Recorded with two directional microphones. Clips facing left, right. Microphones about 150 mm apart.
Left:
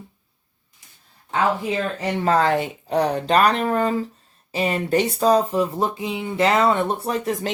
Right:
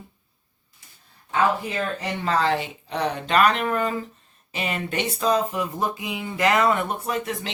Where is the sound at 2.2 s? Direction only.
45° left (ahead or behind).